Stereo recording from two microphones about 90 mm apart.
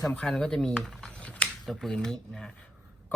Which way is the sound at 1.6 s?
Centre (ahead or behind).